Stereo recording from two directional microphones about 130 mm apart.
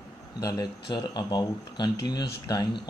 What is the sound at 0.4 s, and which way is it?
Speech, 30° left (ahead or behind).